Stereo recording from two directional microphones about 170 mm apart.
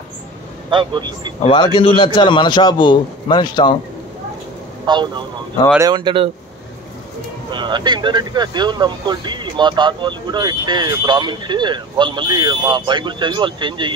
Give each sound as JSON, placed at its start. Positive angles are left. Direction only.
{"t": 0.7, "sound": "speech", "side_deg": -30}
{"t": 1.4, "sound": "a man's voice", "side_deg": 30}
{"t": 4.8, "sound": "speech", "side_deg": -25}
{"t": 7.5, "sound": "speech", "side_deg": -25}